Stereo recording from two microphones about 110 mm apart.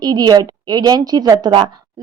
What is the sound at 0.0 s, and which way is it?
A woman's voice, 35° right (ahead or behind).